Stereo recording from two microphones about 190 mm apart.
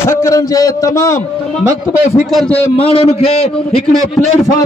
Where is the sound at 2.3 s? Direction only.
5° left (ahead or behind).